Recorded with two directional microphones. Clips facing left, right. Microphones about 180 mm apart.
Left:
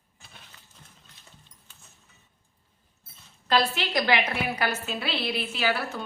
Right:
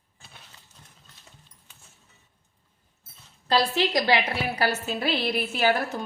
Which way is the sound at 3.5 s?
35° right (ahead or behind).